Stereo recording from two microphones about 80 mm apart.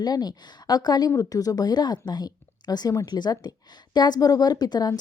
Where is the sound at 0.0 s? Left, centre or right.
Left.